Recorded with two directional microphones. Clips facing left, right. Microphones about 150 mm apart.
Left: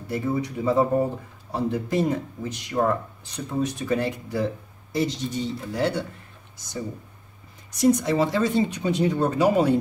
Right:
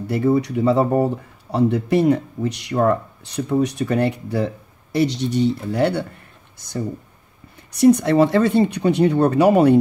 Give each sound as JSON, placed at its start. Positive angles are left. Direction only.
{"t": 0.0, "sound": "speech", "side_deg": -70}
{"t": 7.7, "sound": "speech", "side_deg": -60}